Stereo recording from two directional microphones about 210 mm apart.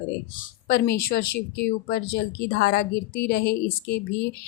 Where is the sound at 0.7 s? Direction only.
45° left (ahead or behind).